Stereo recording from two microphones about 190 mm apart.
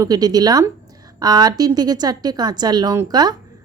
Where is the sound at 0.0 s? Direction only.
20° right (ahead or behind).